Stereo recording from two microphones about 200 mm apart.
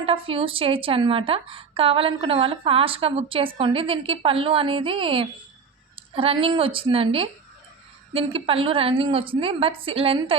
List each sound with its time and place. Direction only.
0.0 s a woman's voice: 25° right (ahead or behind)